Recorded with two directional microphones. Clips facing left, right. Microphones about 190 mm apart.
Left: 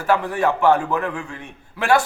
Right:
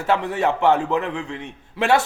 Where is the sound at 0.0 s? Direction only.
20° right (ahead or behind).